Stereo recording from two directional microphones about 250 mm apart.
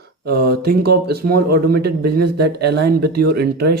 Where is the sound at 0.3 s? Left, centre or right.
Right.